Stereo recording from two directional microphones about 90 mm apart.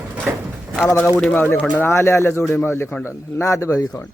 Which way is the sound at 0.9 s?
30° left (ahead or behind).